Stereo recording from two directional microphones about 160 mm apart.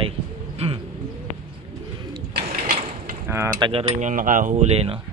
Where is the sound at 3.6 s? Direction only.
35° right (ahead or behind).